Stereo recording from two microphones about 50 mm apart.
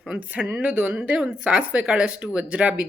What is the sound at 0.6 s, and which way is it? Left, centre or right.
Speech, right.